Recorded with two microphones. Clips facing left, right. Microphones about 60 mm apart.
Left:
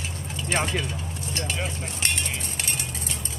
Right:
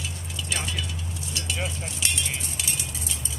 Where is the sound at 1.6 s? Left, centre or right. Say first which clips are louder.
Left 2 dB; left.